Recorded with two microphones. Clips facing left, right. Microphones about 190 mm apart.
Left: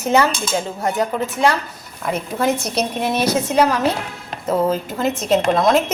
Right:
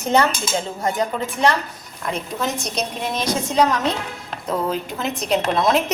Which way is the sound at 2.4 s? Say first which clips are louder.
Left 8 dB; 60° left (ahead or behind).